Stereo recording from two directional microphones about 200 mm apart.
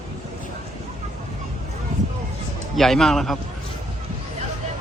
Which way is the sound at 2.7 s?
Centre (ahead or behind).